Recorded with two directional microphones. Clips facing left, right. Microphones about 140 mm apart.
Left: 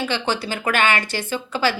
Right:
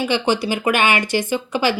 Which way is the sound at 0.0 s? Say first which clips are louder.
Right 5 dB; 15° right (ahead or behind).